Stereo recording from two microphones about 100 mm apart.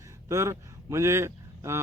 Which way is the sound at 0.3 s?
30° right (ahead or behind).